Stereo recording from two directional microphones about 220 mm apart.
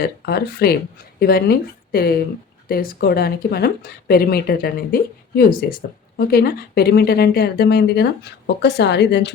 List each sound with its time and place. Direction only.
0.0 s speech: 45° left (ahead or behind)